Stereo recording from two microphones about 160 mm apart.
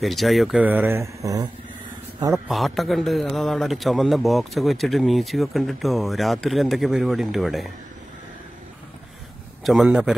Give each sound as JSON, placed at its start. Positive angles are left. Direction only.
{"t": 0.0, "sound": "speech", "side_deg": 0}
{"t": 2.4, "sound": "a man's voice", "side_deg": 0}
{"t": 9.7, "sound": "a man's voice", "side_deg": -5}